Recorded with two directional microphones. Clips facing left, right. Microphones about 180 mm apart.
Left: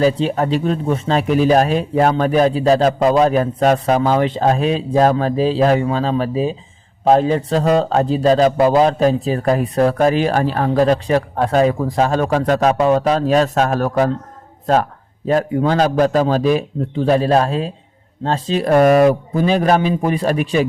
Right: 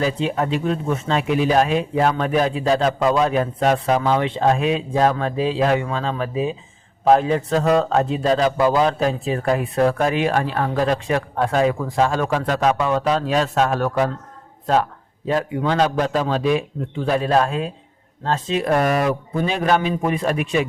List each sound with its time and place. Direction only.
0.0 s speech: 35° left (ahead or behind)
15.3 s a man's voice: 45° left (ahead or behind)